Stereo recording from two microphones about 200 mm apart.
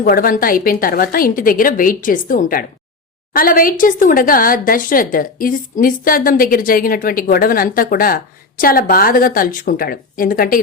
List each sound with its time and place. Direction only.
0.0 s speech: 45° left (ahead or behind)